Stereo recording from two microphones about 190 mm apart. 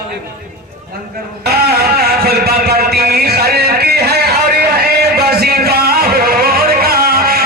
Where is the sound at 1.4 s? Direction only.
55° right (ahead or behind).